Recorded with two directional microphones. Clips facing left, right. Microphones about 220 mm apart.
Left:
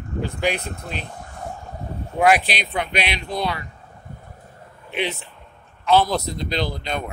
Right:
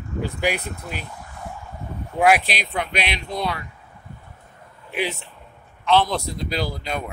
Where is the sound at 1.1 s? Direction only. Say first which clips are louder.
Left 2 dB; 45° left (ahead or behind).